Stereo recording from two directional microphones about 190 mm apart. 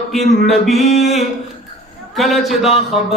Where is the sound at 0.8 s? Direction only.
35° left (ahead or behind).